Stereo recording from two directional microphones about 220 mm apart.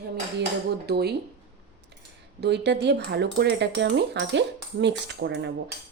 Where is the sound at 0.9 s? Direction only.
45° right (ahead or behind).